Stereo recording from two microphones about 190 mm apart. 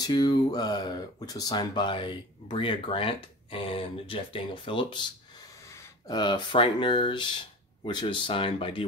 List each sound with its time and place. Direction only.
0.0 s speech: 20° left (ahead or behind)
6.0 s speech: 25° left (ahead or behind)